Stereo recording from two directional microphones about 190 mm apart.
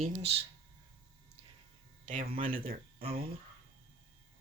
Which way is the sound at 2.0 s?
45° right (ahead or behind).